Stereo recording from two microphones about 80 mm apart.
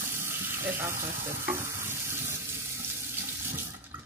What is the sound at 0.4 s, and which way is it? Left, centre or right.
Frying, right.